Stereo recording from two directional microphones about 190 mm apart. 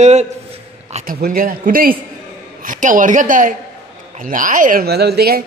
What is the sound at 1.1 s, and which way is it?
A man's voice, 50° right (ahead or behind).